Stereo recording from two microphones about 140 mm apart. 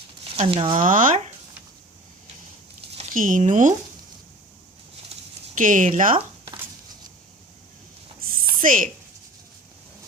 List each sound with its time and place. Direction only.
0.3 s speech: 40° right (ahead or behind)
0.9 s speech: 70° right (ahead or behind)
3.1 s speech: 75° right (ahead or behind)
5.5 s speech: 70° right (ahead or behind)
8.3 s a sound: 75° right (ahead or behind)